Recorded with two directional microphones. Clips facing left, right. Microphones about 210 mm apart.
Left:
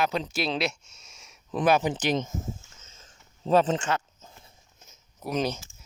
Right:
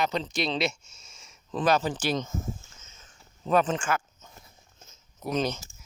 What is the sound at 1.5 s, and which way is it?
Speech, 15° left (ahead or behind).